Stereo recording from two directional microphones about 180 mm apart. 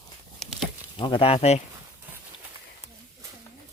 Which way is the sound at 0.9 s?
30° left (ahead or behind).